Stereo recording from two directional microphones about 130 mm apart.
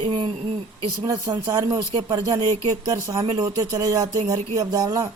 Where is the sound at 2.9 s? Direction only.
25° right (ahead or behind).